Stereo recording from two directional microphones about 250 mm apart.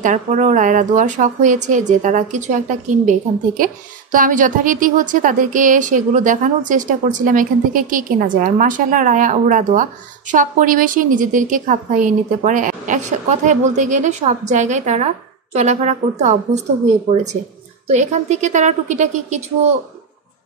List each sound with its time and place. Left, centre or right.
0.0 s a woman's voice: right
17.8 s a woman's voice: right